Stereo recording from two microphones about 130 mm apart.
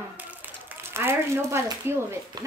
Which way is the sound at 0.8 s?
20° right (ahead or behind).